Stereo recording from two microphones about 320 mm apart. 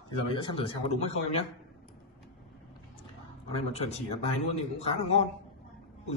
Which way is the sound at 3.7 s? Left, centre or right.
Centre.